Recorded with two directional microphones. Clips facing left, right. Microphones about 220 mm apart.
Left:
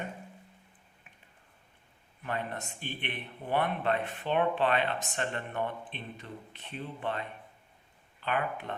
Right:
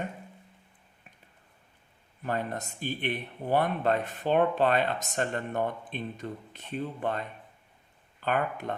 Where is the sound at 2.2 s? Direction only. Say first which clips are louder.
Right 4 dB; 40° right (ahead or behind).